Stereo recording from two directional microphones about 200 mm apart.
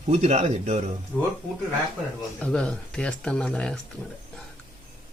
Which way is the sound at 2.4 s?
5° left (ahead or behind).